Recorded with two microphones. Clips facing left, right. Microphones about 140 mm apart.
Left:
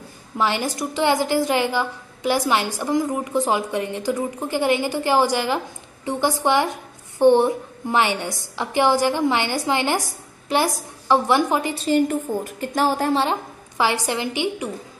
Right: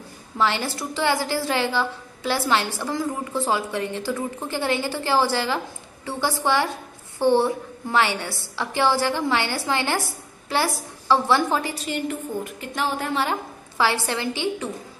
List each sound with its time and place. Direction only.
0.4 s a woman's voice: 15° left (ahead or behind)
11.9 s a woman's voice: 40° left (ahead or behind); by 14.7 s 15° left (ahead or behind)